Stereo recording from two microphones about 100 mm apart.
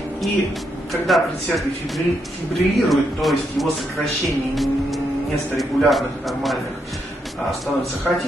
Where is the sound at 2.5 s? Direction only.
Centre (ahead or behind).